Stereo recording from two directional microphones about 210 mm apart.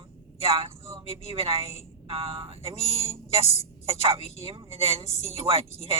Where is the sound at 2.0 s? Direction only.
25° right (ahead or behind).